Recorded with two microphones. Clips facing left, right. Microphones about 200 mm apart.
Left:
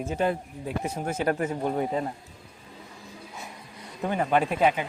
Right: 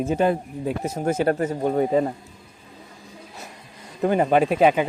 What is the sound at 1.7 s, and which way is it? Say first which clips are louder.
Speech: right 7 dB; 90° right.